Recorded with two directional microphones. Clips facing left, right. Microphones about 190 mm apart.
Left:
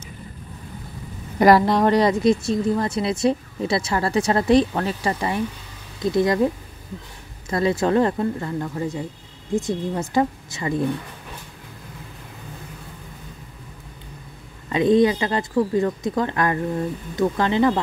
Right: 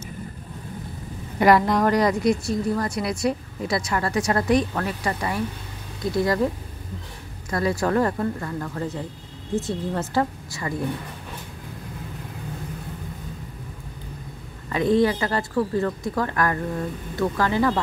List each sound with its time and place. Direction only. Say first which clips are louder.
1.4 s a woman's voice: left 3 dB; 35° left (ahead or behind)
7.5 s a woman's voice: left 3 dB; 20° left (ahead or behind)
14.7 s a woman's voice: left 3 dB; 20° left (ahead or behind)